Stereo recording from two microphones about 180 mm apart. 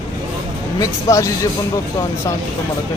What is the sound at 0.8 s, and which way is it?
Speech, 20° left (ahead or behind).